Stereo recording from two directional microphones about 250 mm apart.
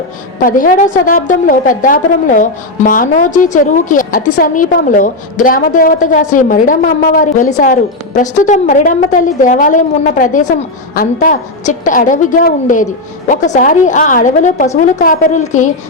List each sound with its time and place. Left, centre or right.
0.4 s a woman's voice: left